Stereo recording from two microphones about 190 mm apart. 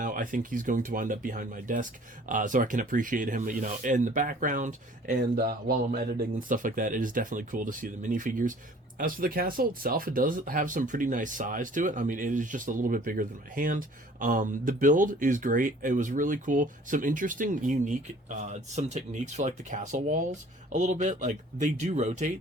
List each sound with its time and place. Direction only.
0.0 s speech: 45° right (ahead or behind)